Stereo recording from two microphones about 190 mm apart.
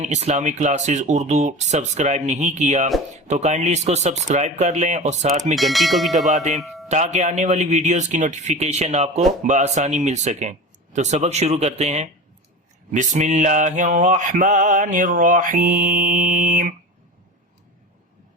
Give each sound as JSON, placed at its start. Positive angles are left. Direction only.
{"t": 0.0, "sound": "speech", "side_deg": -35}
{"t": 5.5, "sound": "speech", "side_deg": 0}
{"t": 6.3, "sound": "speech", "side_deg": -40}
{"t": 12.9, "sound": "mantra", "side_deg": -40}